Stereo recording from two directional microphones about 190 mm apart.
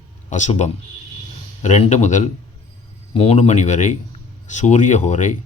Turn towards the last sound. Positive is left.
turn(degrees=40)  # may be behind; listen again after turning